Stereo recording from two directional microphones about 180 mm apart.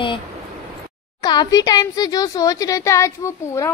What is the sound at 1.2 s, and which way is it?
Speech, 20° left (ahead or behind).